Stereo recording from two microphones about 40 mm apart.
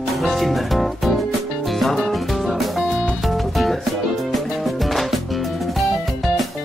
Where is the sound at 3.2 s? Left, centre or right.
Centre.